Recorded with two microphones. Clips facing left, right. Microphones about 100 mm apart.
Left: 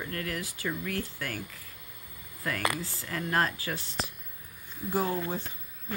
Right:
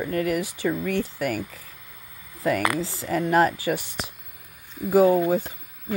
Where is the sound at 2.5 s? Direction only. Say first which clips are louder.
Right 8 dB; 90° right.